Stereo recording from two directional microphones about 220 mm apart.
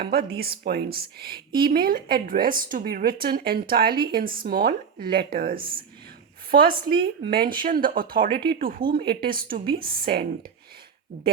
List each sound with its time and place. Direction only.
0.0 s a woman's voice: 45° right (ahead or behind)